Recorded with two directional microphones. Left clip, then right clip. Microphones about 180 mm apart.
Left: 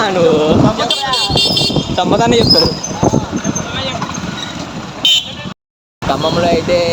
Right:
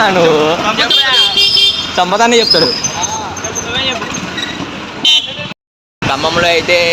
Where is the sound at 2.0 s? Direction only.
30° right (ahead or behind).